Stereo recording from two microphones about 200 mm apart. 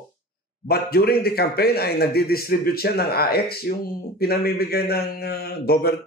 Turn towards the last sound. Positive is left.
turn(degrees=50)  # may be behind; listen again after turning